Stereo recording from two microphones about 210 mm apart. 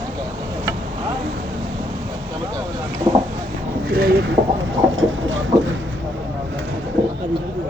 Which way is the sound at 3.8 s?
45° right (ahead or behind).